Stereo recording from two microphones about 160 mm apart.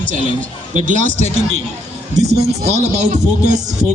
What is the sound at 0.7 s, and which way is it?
Speech, 50° right (ahead or behind).